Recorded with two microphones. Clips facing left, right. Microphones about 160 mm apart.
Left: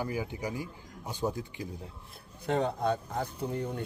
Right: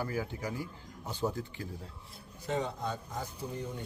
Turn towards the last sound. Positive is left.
turn(degrees=60)  # may be behind; listen again after turning